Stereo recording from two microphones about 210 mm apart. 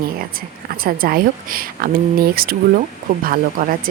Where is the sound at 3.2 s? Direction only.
40° right (ahead or behind).